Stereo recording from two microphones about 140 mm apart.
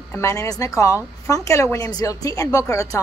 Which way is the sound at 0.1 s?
20° left (ahead or behind).